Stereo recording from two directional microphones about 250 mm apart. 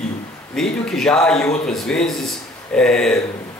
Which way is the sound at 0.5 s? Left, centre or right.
Centre.